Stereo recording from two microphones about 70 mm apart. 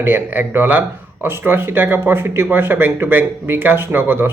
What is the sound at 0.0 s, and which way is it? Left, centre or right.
Speech, right.